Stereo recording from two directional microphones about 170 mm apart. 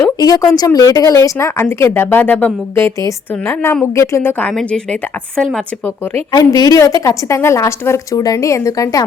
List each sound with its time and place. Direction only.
0.0 s a woman's voice: 20° left (ahead or behind); by 5.6 s centre (ahead or behind)
6.3 s a woman's voice: 20° left (ahead or behind)